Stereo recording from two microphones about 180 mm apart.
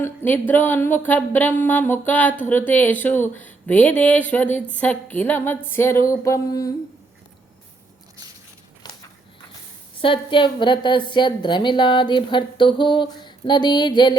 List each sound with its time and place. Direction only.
0.0 s speech: 10° left (ahead or behind)
8.8 s walk: 25° left (ahead or behind)
10.0 s a woman's voice: 30° left (ahead or behind)